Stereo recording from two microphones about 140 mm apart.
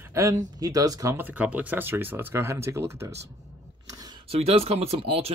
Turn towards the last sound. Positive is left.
turn(degrees=-45)  # may be behind; listen again after turning